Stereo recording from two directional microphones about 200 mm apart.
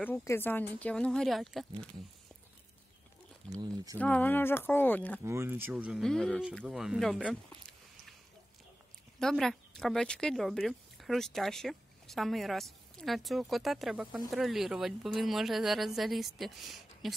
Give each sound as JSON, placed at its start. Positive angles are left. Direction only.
{"t": 0.0, "sound": "speech", "side_deg": 10}
{"t": 3.4, "sound": "speech", "side_deg": -15}
{"t": 4.0, "sound": "speech", "side_deg": 10}
{"t": 5.2, "sound": "speech", "side_deg": -15}
{"t": 9.2, "sound": "speech", "side_deg": 0}